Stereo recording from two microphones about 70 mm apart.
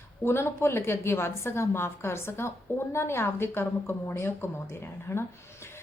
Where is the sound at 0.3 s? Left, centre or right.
Left.